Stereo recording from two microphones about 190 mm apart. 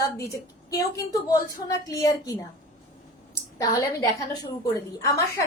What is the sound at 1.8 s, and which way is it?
Speech, 20° left (ahead or behind).